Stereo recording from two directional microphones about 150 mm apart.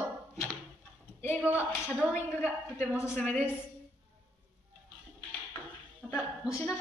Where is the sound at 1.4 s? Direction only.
10° right (ahead or behind).